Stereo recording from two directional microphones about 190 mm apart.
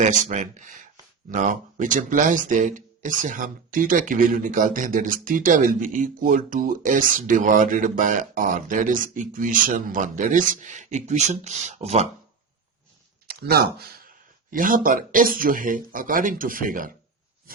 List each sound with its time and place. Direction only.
0.0 s speech: 40° right (ahead or behind)
13.4 s speech: 55° right (ahead or behind)